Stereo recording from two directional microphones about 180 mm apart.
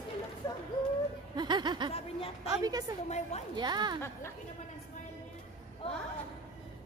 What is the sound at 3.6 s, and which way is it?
Speech, 25° right (ahead or behind).